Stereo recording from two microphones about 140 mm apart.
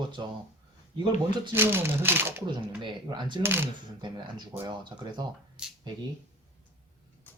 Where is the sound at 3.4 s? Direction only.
15° right (ahead or behind).